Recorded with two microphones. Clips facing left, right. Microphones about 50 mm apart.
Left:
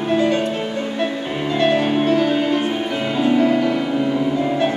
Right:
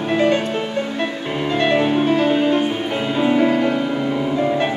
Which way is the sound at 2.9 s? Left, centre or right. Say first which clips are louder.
Even; centre.